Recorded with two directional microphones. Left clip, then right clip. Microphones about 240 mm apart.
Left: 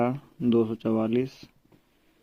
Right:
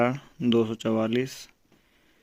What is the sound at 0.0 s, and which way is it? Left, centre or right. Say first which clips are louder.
Speech: right 2 dB; right.